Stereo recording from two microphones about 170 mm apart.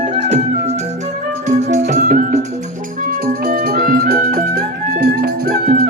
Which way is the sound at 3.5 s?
60° right (ahead or behind).